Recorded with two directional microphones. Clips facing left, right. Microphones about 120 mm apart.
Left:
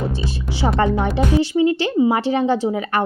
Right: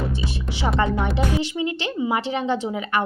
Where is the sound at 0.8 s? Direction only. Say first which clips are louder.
Left 4 dB; 40° left (ahead or behind).